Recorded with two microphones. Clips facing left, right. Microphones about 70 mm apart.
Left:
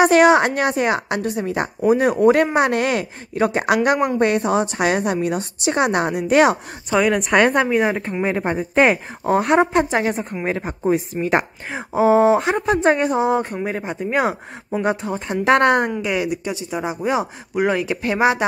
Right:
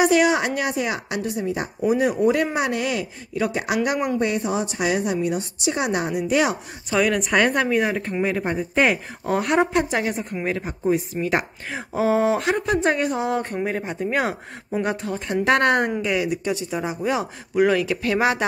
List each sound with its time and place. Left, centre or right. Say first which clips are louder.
0.0 s speech: left 5 dB; left
1.9 s a woman's voice: left 4 dB; left
7.6 s a woman's voice: left 3 dB; left
11.7 s speech: left 5 dB; left
13.3 s speech: left 3 dB; centre